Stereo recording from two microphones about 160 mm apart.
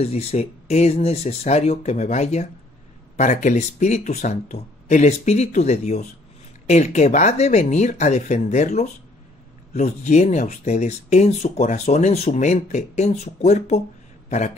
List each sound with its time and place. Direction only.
0.0 s speech: 40° left (ahead or behind)